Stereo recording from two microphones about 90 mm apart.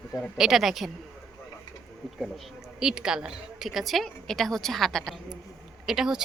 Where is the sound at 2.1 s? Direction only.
5° right (ahead or behind).